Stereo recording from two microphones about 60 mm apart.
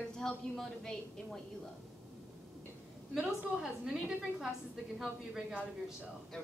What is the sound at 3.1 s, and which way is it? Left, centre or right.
A woman's voice, centre.